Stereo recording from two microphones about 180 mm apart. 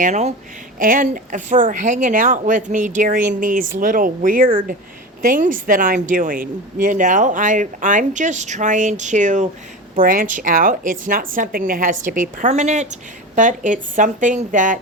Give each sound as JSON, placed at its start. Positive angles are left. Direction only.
{"t": 0.0, "sound": "a woman's voice", "side_deg": -40}